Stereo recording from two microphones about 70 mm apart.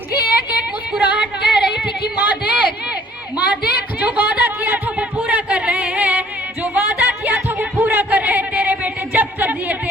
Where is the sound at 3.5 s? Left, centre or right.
Right.